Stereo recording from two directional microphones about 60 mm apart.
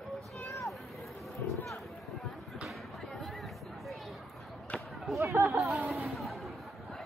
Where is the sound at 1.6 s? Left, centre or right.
Centre.